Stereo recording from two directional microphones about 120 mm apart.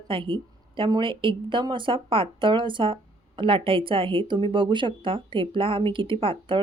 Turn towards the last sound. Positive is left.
turn(degrees=-45)  # may be behind; listen again after turning